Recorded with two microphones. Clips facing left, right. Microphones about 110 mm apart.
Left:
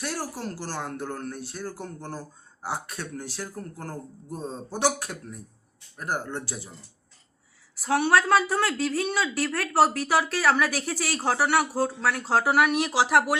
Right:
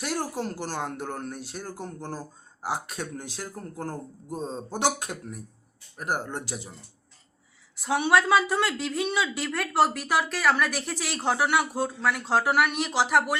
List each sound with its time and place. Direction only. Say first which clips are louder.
0.0 s speech: right 2 dB; 15° right (ahead or behind)
7.8 s speech: left 1 dB; centre (ahead or behind)